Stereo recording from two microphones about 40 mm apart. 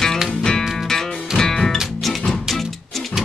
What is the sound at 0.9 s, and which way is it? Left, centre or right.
Music, centre.